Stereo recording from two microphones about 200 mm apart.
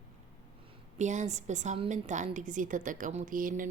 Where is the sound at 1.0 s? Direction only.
35° right (ahead or behind).